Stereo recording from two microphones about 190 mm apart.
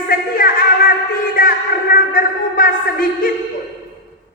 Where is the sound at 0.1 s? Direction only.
50° left (ahead or behind).